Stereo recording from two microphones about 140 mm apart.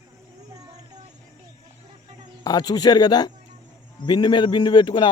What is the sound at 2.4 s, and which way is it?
A man's voice, 30° left (ahead or behind).